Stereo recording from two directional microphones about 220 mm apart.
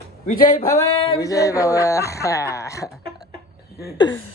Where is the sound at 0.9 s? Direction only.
25° left (ahead or behind).